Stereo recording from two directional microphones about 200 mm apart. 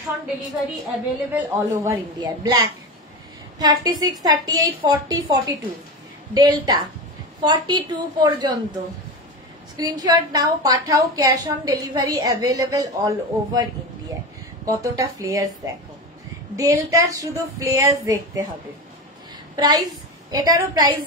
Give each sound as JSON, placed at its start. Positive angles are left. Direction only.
{"t": 1.3, "sound": "a woman's voice", "side_deg": -15}
{"t": 9.8, "sound": "a woman's voice", "side_deg": -20}
{"t": 14.7, "sound": "speech", "side_deg": -15}
{"t": 19.5, "sound": "a woman's voice", "side_deg": -20}